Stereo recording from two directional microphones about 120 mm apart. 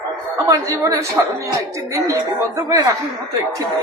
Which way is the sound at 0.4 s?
20° right (ahead or behind).